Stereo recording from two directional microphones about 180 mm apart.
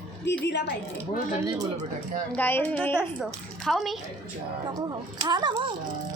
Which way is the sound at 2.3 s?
10° left (ahead or behind).